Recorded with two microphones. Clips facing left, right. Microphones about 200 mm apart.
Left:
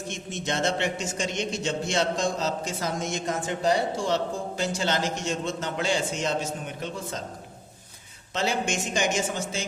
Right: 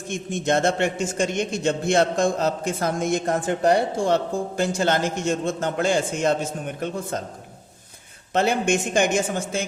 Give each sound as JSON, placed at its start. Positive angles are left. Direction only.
{"t": 0.1, "sound": "a man's voice", "side_deg": -50}
{"t": 8.3, "sound": "speech", "side_deg": -55}